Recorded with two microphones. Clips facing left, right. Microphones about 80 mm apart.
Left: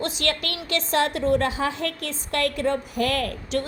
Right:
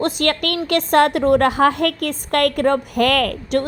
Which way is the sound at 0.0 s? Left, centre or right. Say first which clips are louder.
Right 7 dB; right.